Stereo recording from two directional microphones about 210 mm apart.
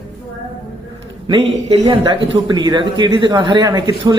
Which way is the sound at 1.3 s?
25° right (ahead or behind).